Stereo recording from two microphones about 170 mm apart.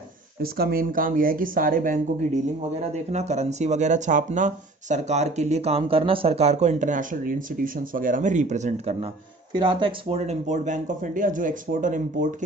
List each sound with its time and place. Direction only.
0.4 s speech: 65° right (ahead or behind)
2.9 s speech: 40° right (ahead or behind)
9.5 s speech: 30° right (ahead or behind); by 12.3 s 50° right (ahead or behind)